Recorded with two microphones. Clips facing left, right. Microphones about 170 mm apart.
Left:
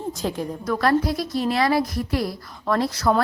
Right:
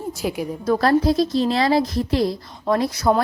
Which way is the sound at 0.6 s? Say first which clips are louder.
Right 4 dB; 30° right (ahead or behind).